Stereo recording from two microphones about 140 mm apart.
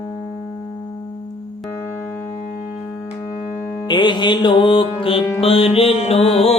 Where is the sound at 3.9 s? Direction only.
35° left (ahead or behind).